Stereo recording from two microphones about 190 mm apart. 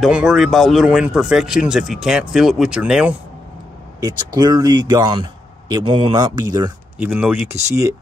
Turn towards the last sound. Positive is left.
turn(degrees=-15)  # may be behind; listen again after turning